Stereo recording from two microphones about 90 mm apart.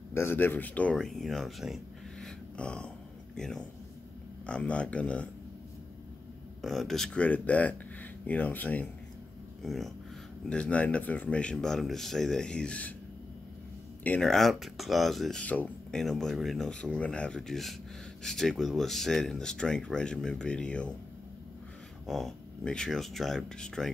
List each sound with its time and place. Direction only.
0.1 s speech: 25° left (ahead or behind)
0.9 s speech: 5° left (ahead or behind)
6.6 s speech: centre (ahead or behind)
7.2 s speech: 15° left (ahead or behind)
9.6 s speech: centre (ahead or behind)
10.5 s speech: 15° left (ahead or behind)
14.2 s speech: 5° left (ahead or behind)
15.4 s speech: 15° left (ahead or behind)
16.0 s speech: 5° left (ahead or behind)
22.0 s speech: centre (ahead or behind)